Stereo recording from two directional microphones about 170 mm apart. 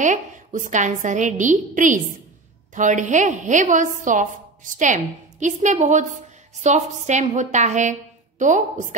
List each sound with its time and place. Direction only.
0.0 s a woman's voice: 50° right (ahead or behind)